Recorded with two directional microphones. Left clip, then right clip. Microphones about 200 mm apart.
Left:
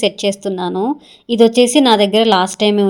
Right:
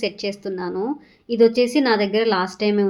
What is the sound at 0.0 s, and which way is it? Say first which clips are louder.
A woman's voice: left 9 dB; 45° left (ahead or behind).